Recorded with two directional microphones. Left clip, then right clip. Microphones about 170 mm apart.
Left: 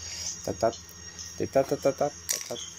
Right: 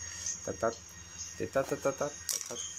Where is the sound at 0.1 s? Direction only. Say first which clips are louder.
Left 5 dB; 5° left (ahead or behind).